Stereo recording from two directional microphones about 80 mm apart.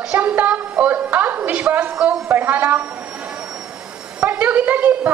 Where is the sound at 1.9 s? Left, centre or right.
Centre.